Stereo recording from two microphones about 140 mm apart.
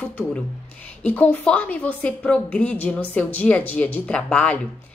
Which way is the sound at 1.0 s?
10° left (ahead or behind).